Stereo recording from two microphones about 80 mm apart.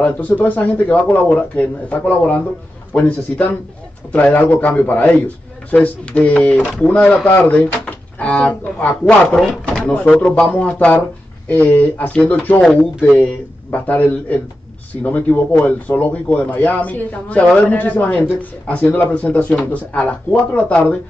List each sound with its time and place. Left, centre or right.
0.0 s speech: centre
13.7 s speech: left